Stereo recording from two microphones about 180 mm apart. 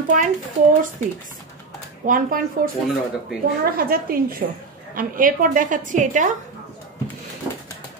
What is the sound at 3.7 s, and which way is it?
A woman's voice, 55° right (ahead or behind).